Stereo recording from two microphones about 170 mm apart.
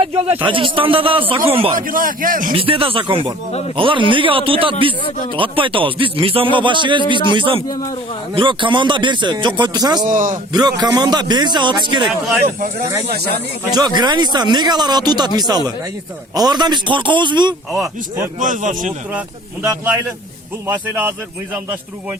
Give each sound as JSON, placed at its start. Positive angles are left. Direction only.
{"t": 0.0, "sound": "speech", "side_deg": -35}
{"t": 1.7, "sound": "speech", "side_deg": -55}
{"t": 2.5, "sound": "speech", "side_deg": -35}
{"t": 10.0, "sound": "speech", "side_deg": -50}
{"t": 10.5, "sound": "speech", "side_deg": -25}
{"t": 13.7, "sound": "speech", "side_deg": -25}
{"t": 17.7, "sound": "speech", "side_deg": 0}
{"t": 18.3, "sound": "speech", "side_deg": -50}
{"t": 20.7, "sound": "a man's voice", "side_deg": -10}